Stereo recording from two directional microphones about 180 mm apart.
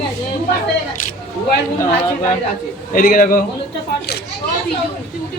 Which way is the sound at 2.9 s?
50° left (ahead or behind).